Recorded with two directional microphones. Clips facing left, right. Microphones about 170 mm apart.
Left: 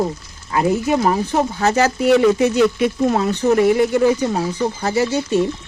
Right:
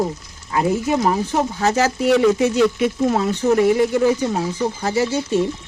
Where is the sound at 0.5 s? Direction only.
60° left (ahead or behind).